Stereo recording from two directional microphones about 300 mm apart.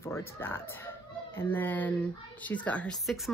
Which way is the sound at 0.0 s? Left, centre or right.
Centre.